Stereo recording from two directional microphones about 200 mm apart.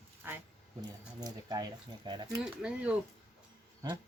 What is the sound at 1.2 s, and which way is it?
Speech, 20° right (ahead or behind).